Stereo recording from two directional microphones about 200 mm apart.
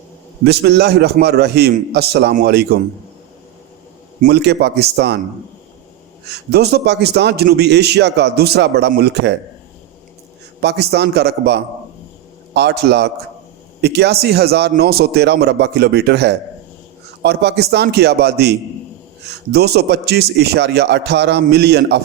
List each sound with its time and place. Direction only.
0.4 s a man's voice: 55° right (ahead or behind)
4.2 s a man's voice: 55° right (ahead or behind)
6.2 s a man's voice: 55° right (ahead or behind)
10.6 s a man's voice: 55° right (ahead or behind)